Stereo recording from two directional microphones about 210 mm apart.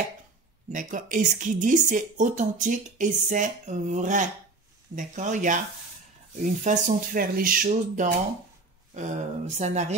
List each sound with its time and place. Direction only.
0.7 s a woman's voice: 40° right (ahead or behind)
6.6 s a woman's voice: 35° right (ahead or behind)